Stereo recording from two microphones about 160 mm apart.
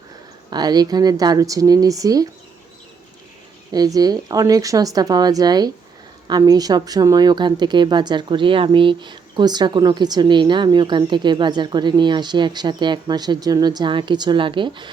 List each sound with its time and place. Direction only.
0.5 s a woman's voice: 25° right (ahead or behind)
3.7 s a woman's voice: 25° right (ahead or behind)